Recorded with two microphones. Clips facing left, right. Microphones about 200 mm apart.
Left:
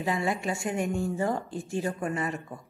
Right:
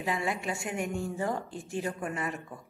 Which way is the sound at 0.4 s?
35° left (ahead or behind).